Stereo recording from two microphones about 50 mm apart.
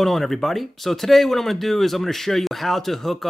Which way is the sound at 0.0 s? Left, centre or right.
Centre.